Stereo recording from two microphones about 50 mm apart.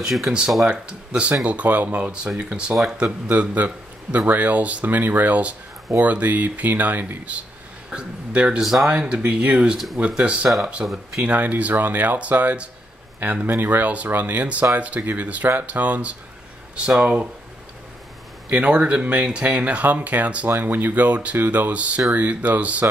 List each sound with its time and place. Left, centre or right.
0.0 s speech: centre
0.7 s speech: right
3.3 s a man's voice: right
7.9 s speech: right
8.5 s speech: centre
8.8 s speech: right
10.9 s speech: centre
11.2 s speech: right
18.5 s speech: right
20.4 s speech: right